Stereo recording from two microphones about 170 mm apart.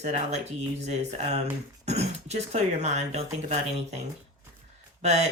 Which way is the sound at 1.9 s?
40° right (ahead or behind).